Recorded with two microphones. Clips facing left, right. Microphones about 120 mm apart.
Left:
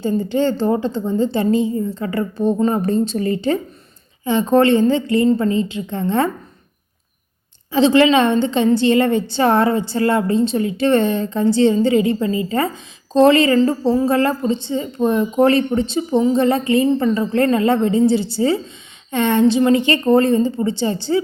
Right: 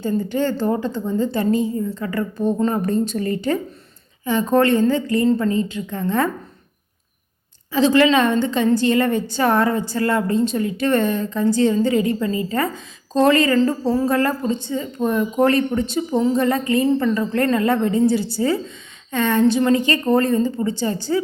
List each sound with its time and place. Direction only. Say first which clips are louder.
0.0 s a woman's voice: left 3 dB; 25° left (ahead or behind)
7.7 s a woman's voice: left 2 dB; 25° left (ahead or behind)